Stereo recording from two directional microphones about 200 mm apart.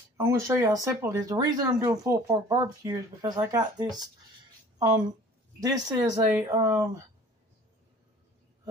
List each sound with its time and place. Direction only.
0.2 s speech: 15° right (ahead or behind)